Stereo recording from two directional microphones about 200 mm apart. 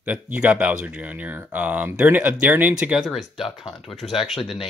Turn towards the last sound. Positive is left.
turn(degrees=0)  # may be behind; listen again after turning